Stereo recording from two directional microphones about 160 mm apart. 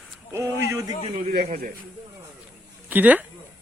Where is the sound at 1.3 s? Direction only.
70° right (ahead or behind).